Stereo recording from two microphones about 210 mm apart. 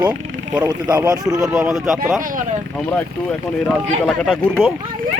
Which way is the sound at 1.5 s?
Centre (ahead or behind).